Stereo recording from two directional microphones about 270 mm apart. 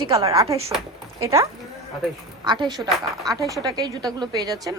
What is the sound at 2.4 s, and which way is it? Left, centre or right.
A woman's voice, centre.